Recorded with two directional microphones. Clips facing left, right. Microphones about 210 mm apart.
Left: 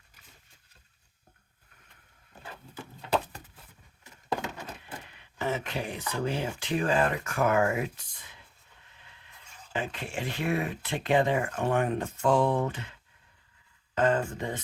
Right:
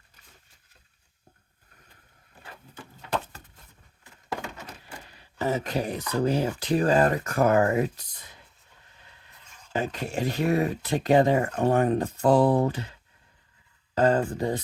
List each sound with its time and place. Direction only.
5.0 s speech: 35° right (ahead or behind)
9.7 s speech: 40° right (ahead or behind)
13.9 s a sound: 35° right (ahead or behind)